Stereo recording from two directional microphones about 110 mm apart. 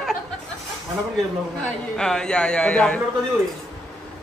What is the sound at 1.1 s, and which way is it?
Speech, 5° left (ahead or behind).